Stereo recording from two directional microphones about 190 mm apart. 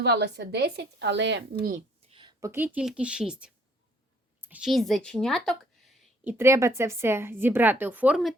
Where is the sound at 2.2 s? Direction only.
15° right (ahead or behind).